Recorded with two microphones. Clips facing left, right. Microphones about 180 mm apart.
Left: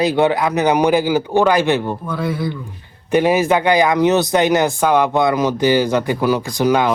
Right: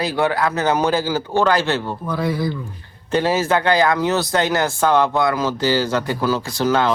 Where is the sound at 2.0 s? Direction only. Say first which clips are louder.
Even; centre (ahead or behind).